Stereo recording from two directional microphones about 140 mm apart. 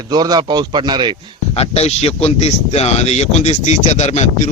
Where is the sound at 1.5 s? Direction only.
50° left (ahead or behind).